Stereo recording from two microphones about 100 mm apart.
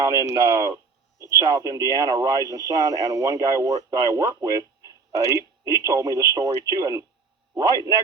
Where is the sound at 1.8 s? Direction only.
30° right (ahead or behind).